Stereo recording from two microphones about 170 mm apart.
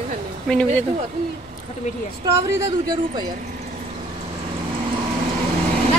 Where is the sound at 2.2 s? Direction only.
20° right (ahead or behind).